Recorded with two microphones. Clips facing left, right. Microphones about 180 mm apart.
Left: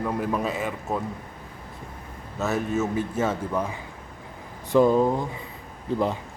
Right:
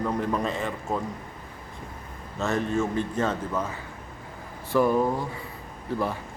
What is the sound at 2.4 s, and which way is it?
Speech, 5° left (ahead or behind).